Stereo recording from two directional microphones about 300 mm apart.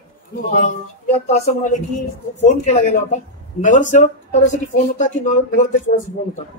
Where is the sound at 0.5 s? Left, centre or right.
Left.